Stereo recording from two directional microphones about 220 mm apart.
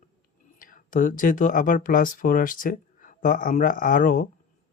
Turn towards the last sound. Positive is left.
turn(degrees=35)  # may be behind; listen again after turning